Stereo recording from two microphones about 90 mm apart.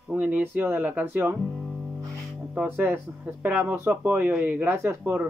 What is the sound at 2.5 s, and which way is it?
Speech, 20° right (ahead or behind).